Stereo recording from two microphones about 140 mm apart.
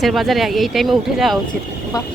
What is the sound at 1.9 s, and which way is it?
Speech, 25° left (ahead or behind).